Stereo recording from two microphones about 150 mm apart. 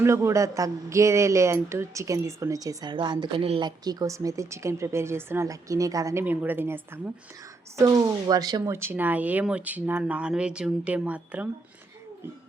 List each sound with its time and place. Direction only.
0.0 s speech: 20° right (ahead or behind); by 3.7 s 35° right (ahead or behind)
3.7 s speech: 25° right (ahead or behind); by 11.4 s 10° right (ahead or behind)